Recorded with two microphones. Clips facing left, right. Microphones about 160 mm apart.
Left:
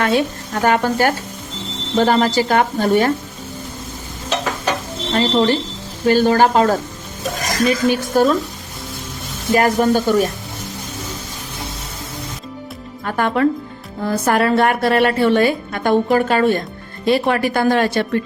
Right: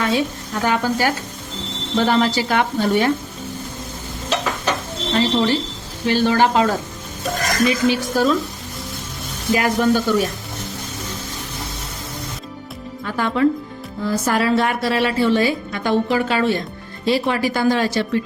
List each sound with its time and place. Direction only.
0.0 s speech: 60° left (ahead or behind)
2.0 s speech: 45° left (ahead or behind)
5.1 s speech: 50° left (ahead or behind)
9.6 s speech: 50° left (ahead or behind)
13.1 s a woman's voice: 55° left (ahead or behind)